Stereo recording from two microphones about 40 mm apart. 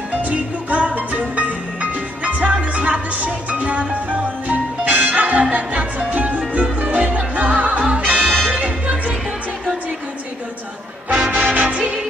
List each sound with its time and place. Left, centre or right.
0.2 s music: right
11.1 s music: right